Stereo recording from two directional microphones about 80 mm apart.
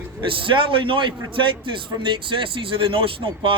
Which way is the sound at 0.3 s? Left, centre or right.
Right.